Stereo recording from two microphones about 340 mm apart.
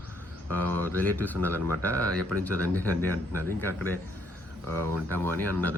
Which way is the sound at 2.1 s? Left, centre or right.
Right.